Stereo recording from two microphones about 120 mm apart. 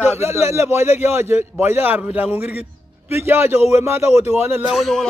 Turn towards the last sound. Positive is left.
turn(degrees=0)  # may be behind; listen again after turning